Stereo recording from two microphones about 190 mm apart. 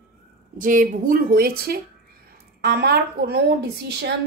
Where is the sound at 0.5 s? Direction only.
45° right (ahead or behind).